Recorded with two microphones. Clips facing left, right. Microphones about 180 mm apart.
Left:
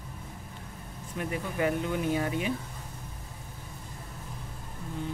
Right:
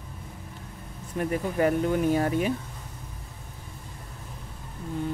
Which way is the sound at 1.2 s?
45° right (ahead or behind).